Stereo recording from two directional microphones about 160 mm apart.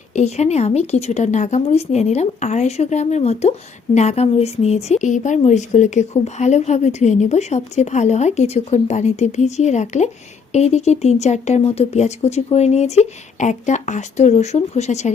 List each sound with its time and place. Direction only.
0.1 s a woman's voice: 45° left (ahead or behind)